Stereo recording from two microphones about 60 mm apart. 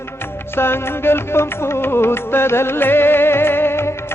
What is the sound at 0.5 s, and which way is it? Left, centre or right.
Music, left.